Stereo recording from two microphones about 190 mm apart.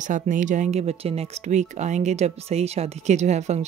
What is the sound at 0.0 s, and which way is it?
Speech, 40° right (ahead or behind).